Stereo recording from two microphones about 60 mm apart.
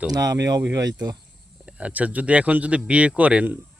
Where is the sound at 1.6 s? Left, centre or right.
Right.